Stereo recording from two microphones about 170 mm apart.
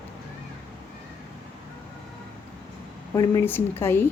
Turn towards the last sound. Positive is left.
turn(degrees=15)  # may be behind; listen again after turning